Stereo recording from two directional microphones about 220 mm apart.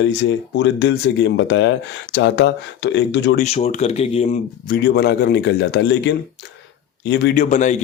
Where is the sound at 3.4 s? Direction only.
30° left (ahead or behind).